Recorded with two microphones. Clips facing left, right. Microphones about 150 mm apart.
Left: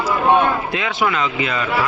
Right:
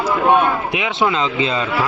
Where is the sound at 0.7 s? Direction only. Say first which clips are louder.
Right 2 dB; 20° right (ahead or behind).